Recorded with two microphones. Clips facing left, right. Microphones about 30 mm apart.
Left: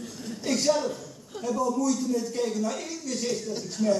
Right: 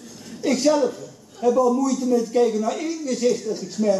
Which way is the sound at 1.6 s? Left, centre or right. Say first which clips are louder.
Right 6 dB; right.